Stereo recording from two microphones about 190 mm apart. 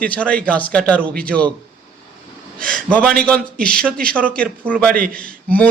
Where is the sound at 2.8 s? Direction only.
5° left (ahead or behind).